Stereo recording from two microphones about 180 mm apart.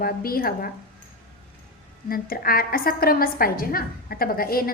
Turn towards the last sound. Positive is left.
turn(degrees=55)  # may be behind; listen again after turning